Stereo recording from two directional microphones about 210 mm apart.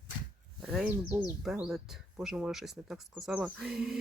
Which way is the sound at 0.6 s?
5° right (ahead or behind).